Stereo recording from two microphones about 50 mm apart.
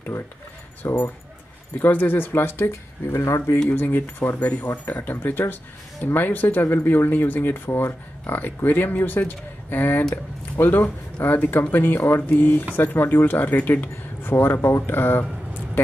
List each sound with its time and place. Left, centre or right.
0.8 s speech: left
1.8 s speech: left
3.2 s speech: left
3.7 s speech: left
14.3 s speech: left